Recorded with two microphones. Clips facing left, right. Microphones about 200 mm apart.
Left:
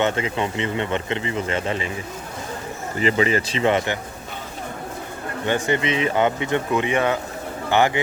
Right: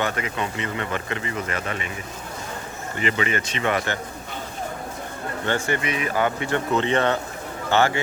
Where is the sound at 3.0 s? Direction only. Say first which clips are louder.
Left 5 dB; 35° left (ahead or behind).